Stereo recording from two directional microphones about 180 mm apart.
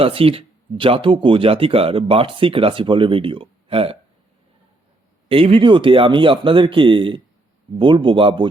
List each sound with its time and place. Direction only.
0.0 s speech: 30° right (ahead or behind)
5.3 s speech: 30° right (ahead or behind)